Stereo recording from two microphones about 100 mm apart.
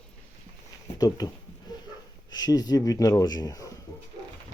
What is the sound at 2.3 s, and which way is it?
Speech, 45° left (ahead or behind).